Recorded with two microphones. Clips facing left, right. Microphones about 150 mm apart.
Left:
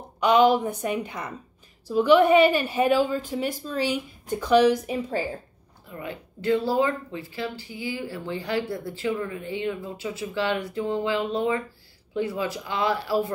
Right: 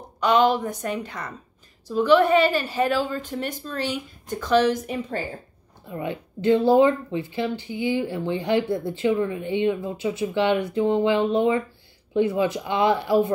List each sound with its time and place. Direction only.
0.2 s a woman's voice: 10° left (ahead or behind)
5.9 s speech: 25° right (ahead or behind)